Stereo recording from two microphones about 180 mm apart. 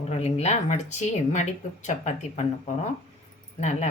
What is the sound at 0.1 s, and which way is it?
Speech, 35° left (ahead or behind).